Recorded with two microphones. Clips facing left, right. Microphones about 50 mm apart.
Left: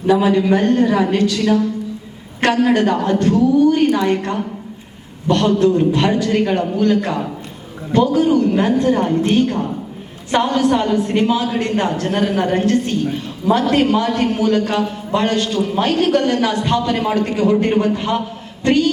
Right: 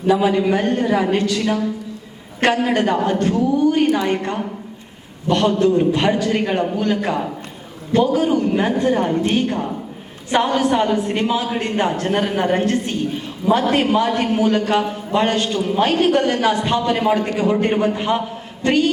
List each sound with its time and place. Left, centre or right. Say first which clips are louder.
0.1 s a woman's voice: left 2 dB; centre; by 18.9 s right